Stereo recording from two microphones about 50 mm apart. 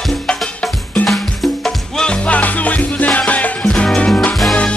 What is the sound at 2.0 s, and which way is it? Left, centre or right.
Music, left.